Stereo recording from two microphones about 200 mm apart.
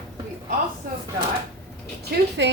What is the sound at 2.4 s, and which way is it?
Speech, 60° right (ahead or behind).